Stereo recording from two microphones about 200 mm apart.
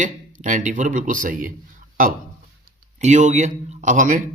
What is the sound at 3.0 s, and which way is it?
A man's voice, 35° right (ahead or behind).